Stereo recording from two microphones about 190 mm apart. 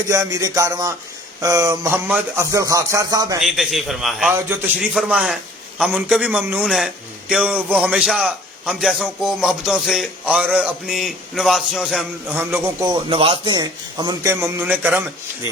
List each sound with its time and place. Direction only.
0.1 s speech: 15° right (ahead or behind)
3.4 s a man's voice: centre (ahead or behind)